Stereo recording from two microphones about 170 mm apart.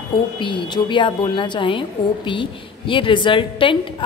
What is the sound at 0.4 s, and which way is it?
A woman's voice, 30° left (ahead or behind).